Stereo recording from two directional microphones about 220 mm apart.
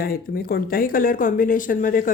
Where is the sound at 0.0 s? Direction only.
45° left (ahead or behind).